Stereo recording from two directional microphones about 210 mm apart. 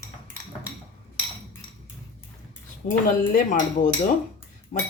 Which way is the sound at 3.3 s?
40° left (ahead or behind).